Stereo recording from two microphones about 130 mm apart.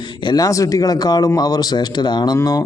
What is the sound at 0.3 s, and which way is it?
Speech, 30° left (ahead or behind).